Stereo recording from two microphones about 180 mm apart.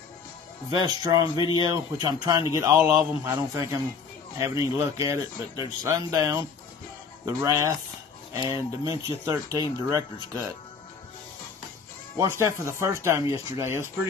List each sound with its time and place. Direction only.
0.7 s speech: 25° right (ahead or behind)
1.3 s speech: 25° left (ahead or behind)
1.6 s speech: 25° right (ahead or behind)
12.2 s speech: 15° right (ahead or behind)